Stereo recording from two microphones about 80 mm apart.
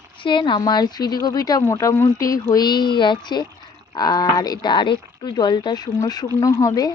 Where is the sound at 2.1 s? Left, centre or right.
Left.